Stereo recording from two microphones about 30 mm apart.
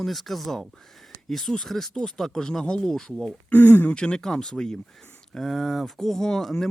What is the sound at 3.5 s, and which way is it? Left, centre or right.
Speech, left.